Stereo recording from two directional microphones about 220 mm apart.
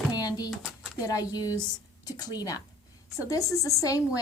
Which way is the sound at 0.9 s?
15° left (ahead or behind).